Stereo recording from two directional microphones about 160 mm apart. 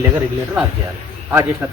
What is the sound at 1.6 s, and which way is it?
Speech, 15° right (ahead or behind).